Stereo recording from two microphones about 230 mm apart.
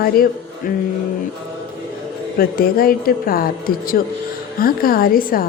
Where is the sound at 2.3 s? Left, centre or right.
Left.